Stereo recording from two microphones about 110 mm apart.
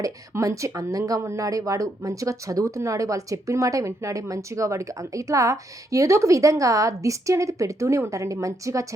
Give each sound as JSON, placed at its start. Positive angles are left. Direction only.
{"t": 0.0, "sound": "speech", "side_deg": -30}